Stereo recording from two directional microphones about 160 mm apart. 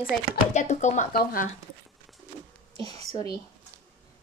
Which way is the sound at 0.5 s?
45° left (ahead or behind).